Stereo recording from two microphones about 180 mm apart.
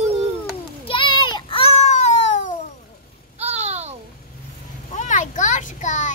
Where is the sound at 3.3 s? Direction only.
35° right (ahead or behind).